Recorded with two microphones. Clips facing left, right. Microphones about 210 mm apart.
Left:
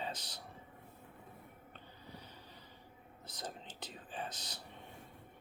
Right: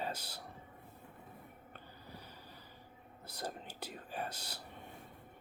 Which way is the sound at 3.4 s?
10° right (ahead or behind).